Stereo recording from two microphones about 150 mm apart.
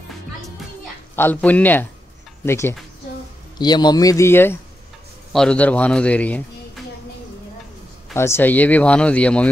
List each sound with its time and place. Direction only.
1.1 s speech: 10° left (ahead or behind)
3.5 s a man's voice: 25° left (ahead or behind); by 6.8 s 10° left (ahead or behind)
8.1 s speech: 15° left (ahead or behind)